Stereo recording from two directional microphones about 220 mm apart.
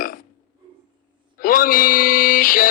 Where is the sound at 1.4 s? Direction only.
40° left (ahead or behind).